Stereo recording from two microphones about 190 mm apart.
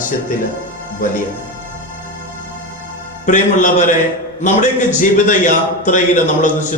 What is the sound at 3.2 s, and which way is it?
A man's voice, 40° left (ahead or behind).